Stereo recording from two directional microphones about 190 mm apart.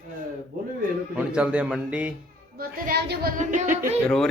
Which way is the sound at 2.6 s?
55° right (ahead or behind).